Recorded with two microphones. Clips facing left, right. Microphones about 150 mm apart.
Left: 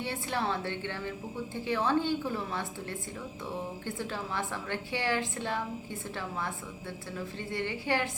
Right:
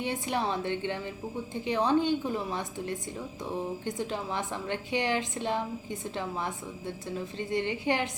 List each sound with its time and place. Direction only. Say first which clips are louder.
0.0 s a woman's voice: right 2 dB; 15° right (ahead or behind)